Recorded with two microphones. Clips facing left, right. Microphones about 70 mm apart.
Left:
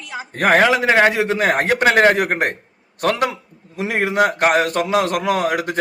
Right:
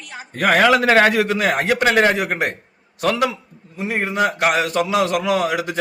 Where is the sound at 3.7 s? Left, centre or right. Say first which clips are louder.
Left 3 dB; left.